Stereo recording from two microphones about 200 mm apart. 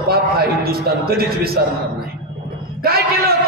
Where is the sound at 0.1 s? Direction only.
50° right (ahead or behind).